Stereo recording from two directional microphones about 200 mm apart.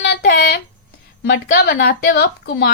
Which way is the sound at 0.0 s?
50° left (ahead or behind).